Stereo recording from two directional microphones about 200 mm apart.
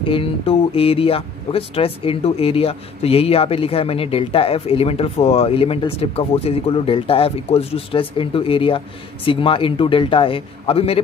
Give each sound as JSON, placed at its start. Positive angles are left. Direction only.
{"t": 0.0, "sound": "speech", "side_deg": 25}